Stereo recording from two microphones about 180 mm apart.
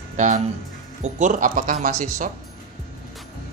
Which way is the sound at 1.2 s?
45° right (ahead or behind).